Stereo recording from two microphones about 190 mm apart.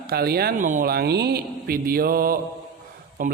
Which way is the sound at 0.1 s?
55° right (ahead or behind).